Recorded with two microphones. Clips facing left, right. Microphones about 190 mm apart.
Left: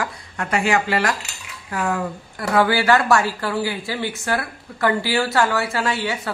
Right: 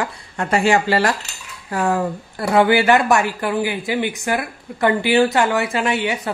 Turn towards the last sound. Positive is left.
turn(degrees=-20)  # may be behind; listen again after turning